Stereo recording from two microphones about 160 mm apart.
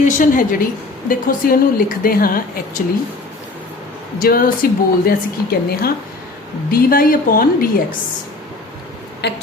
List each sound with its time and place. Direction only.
0.0 s a woman's voice: 55° left (ahead or behind)
4.2 s a woman's voice: 65° left (ahead or behind)
9.2 s a sound: 90° left